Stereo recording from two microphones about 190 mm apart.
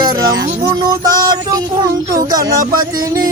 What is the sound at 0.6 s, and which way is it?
Music, 20° right (ahead or behind).